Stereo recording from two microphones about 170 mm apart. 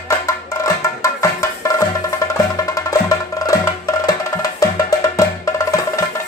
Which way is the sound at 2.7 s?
20° left (ahead or behind).